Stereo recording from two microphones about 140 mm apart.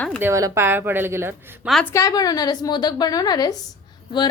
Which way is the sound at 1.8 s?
20° left (ahead or behind).